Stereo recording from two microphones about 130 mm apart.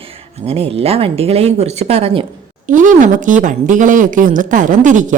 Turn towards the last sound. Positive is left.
turn(degrees=-80)